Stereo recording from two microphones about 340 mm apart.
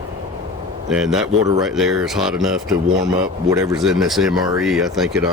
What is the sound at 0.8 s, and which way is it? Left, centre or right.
Speech, centre.